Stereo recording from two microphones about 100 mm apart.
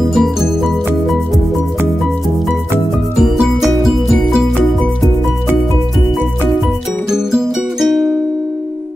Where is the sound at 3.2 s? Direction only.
Centre (ahead or behind).